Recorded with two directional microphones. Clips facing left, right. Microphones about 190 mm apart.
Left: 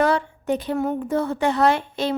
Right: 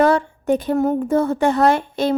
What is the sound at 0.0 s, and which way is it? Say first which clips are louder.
Speech: right 4 dB; 45° right (ahead or behind).